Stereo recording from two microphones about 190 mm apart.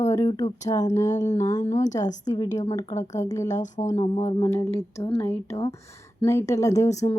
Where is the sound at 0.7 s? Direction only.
25° left (ahead or behind).